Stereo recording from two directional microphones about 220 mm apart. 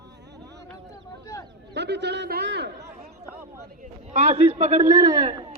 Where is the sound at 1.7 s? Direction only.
50° right (ahead or behind).